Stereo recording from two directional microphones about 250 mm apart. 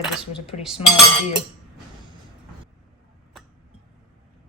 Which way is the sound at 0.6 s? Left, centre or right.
Centre.